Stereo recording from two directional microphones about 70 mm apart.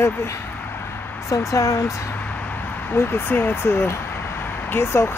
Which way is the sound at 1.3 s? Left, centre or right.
Left.